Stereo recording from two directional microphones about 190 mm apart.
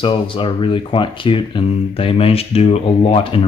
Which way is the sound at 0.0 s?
25° left (ahead or behind).